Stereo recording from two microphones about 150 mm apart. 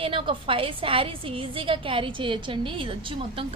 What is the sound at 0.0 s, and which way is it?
A woman's voice, 35° right (ahead or behind).